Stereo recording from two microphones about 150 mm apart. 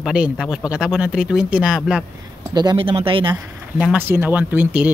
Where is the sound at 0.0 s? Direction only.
5° right (ahead or behind).